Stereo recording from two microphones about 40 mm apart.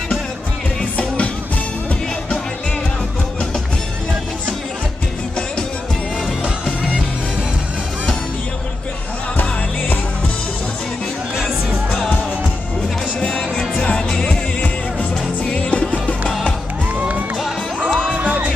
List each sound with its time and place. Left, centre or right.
0.9 s music: left
6.8 s music: right
11.3 s music: centre
13.2 s music: left
15.4 s music: left
18.1 s music: right